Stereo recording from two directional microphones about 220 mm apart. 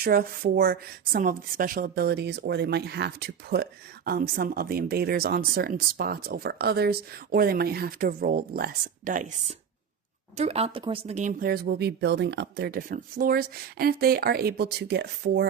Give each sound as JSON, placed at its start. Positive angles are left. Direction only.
{"t": 0.0, "sound": "speech", "side_deg": -45}